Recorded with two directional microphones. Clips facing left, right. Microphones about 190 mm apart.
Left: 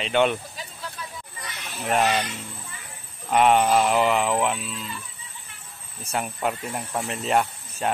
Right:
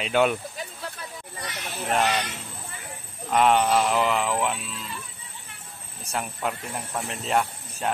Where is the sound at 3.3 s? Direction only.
Centre (ahead or behind).